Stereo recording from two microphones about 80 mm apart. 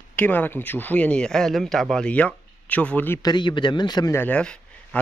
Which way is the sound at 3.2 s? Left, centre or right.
Left.